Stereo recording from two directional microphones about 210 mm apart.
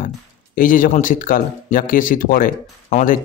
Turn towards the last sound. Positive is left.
turn(degrees=40)  # may be behind; listen again after turning